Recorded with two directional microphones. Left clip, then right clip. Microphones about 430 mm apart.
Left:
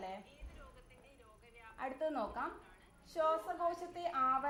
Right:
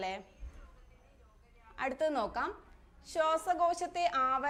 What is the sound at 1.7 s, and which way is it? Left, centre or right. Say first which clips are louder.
A woman's voice: right 6 dB; right.